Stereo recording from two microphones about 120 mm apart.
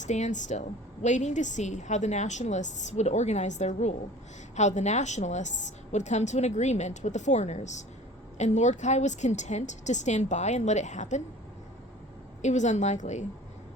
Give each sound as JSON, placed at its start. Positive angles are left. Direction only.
{"t": 0.0, "sound": "a woman's voice", "side_deg": 85}
{"t": 12.4, "sound": "a woman's voice", "side_deg": 75}